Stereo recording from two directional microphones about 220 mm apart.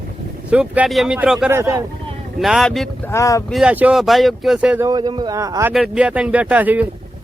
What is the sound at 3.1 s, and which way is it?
Speech, 15° left (ahead or behind).